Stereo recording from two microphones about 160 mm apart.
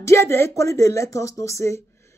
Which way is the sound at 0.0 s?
15° left (ahead or behind).